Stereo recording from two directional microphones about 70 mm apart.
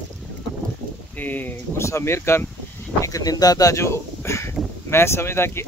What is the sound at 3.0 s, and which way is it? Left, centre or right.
Speech, left.